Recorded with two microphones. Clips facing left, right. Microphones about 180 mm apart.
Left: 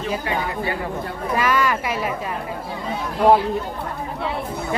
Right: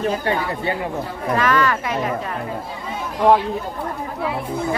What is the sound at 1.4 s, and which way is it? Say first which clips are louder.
Speech: right 1 dB; 10° left (ahead or behind).